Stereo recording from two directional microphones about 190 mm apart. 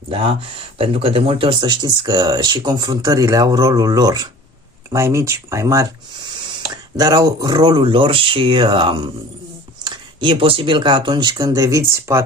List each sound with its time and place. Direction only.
0.8 s speech: 30° right (ahead or behind)